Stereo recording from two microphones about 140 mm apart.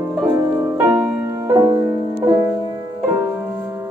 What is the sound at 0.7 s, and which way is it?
Music, 15° right (ahead or behind).